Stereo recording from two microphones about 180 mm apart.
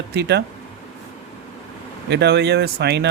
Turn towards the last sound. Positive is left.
turn(degrees=-65)  # may be behind; listen again after turning